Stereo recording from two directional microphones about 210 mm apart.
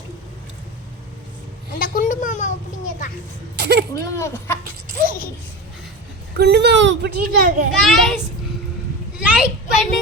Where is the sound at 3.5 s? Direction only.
50° right (ahead or behind).